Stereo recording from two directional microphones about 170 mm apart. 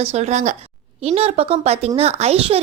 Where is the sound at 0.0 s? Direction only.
40° right (ahead or behind).